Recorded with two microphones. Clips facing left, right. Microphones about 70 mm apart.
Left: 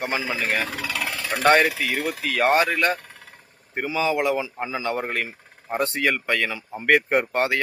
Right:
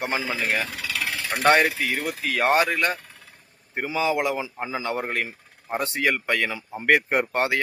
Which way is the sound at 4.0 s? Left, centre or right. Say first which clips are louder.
Left 1 dB; centre.